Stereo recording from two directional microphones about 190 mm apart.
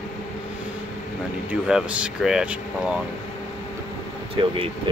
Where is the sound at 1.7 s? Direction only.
5° right (ahead or behind).